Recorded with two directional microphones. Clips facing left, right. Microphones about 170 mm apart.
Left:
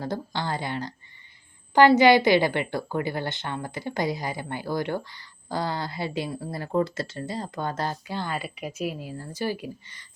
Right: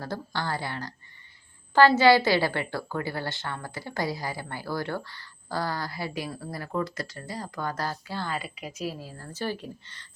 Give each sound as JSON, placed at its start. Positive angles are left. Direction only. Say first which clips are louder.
{"t": 0.0, "sound": "a woman's voice", "louder": "left 3 dB", "side_deg": 20}
{"t": 2.0, "sound": "a woman's voice", "louder": "left 2 dB", "side_deg": 20}